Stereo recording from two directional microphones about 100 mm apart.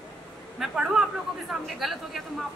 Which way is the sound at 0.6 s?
5° right (ahead or behind).